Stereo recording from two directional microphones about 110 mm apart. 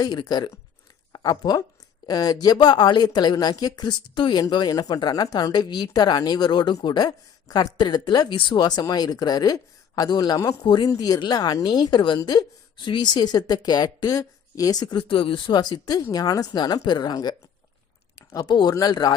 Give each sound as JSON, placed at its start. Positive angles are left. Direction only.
{"t": 0.0, "sound": "speech", "side_deg": 40}
{"t": 14.9, "sound": "speech", "side_deg": 50}